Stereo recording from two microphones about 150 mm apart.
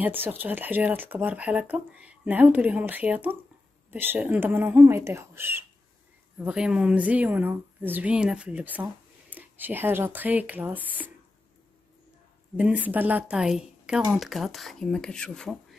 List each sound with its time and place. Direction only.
0.0 s speech: 15° right (ahead or behind)
12.5 s a woman's voice: 10° right (ahead or behind)